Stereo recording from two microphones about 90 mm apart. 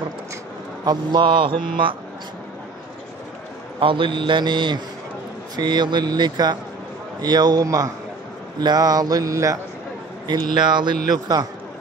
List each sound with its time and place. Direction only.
0.8 s mantra: 60° right (ahead or behind)
3.8 s speech: 70° right (ahead or behind); by 6.6 s 50° right (ahead or behind)
7.2 s mantra: 50° right (ahead or behind)
7.6 s a man's voice: 40° right (ahead or behind)
8.5 s mantra: 50° right (ahead or behind)
10.2 s speech: 55° right (ahead or behind)
11.1 s mantra: 50° right (ahead or behind)